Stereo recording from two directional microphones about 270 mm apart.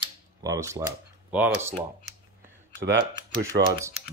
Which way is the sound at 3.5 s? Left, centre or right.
Right.